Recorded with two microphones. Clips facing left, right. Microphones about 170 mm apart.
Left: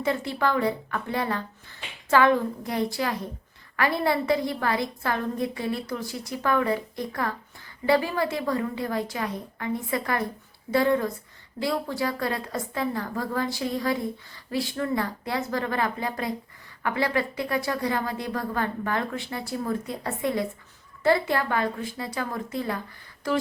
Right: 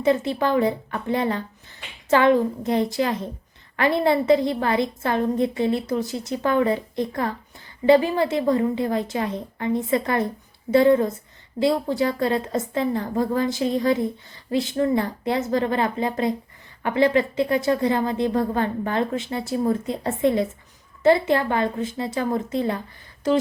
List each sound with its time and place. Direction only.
0.0 s a woman's voice: 20° right (ahead or behind)